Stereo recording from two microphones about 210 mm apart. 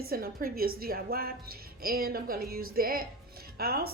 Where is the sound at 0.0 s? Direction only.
45° right (ahead or behind).